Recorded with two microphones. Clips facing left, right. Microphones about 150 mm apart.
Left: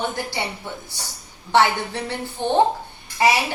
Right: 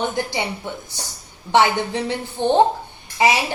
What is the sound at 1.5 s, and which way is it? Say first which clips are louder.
A woman's voice: right 2 dB; 15° right (ahead or behind).